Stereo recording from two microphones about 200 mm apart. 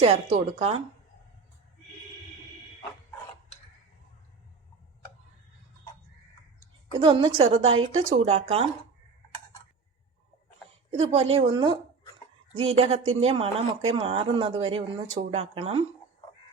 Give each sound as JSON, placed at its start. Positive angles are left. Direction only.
{"t": 0.0, "sound": "a woman's voice", "side_deg": -30}
{"t": 6.9, "sound": "speech", "side_deg": -25}
{"t": 10.9, "sound": "speech", "side_deg": -30}
{"t": 13.1, "sound": "speech", "side_deg": -30}